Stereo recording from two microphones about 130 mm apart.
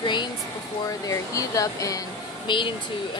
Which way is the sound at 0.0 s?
35° left (ahead or behind).